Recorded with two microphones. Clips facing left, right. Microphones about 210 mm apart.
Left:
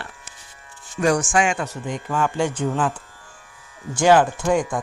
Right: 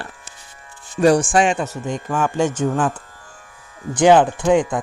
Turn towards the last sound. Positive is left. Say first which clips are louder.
# right 3 dB
turn(degrees=-20)  # may be behind; listen again after turning